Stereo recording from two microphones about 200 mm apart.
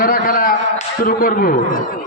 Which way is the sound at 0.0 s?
45° left (ahead or behind).